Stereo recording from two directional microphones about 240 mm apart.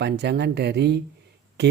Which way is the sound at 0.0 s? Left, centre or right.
Right.